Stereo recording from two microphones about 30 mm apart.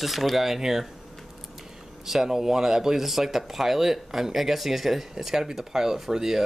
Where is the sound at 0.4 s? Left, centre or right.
Centre.